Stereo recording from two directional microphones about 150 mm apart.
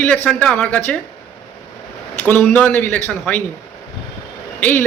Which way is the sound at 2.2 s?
10° left (ahead or behind).